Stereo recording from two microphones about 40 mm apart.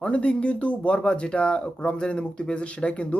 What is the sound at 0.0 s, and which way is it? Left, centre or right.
Speech, left.